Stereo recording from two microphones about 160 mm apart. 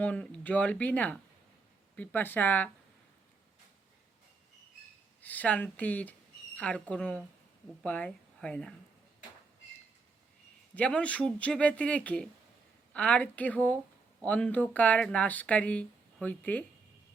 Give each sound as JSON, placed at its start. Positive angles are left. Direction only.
{"t": 0.0, "sound": "speech", "side_deg": 10}
{"t": 5.2, "sound": "speech", "side_deg": 10}
{"t": 10.8, "sound": "speech", "side_deg": 5}